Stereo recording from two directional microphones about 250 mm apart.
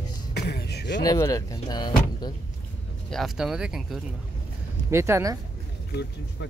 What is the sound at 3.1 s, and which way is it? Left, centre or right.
Speech, centre.